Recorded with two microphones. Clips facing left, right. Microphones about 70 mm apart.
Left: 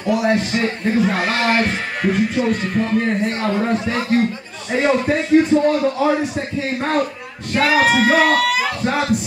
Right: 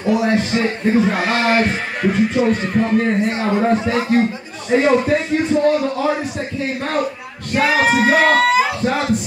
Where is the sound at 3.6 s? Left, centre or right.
Centre.